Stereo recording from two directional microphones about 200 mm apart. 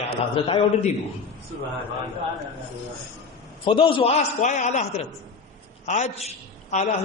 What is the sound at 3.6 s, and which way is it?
A man's voice, 25° left (ahead or behind).